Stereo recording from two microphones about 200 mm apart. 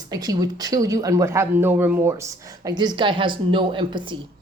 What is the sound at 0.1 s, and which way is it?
Speech, 20° right (ahead or behind).